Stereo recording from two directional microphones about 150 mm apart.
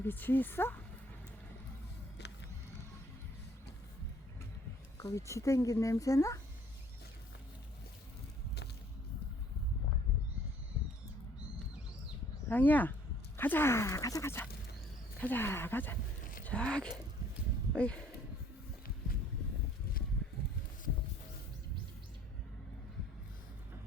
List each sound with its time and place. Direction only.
0.0 s speech: 15° left (ahead or behind)
4.9 s speech: 20° left (ahead or behind)
12.5 s speech: 10° left (ahead or behind)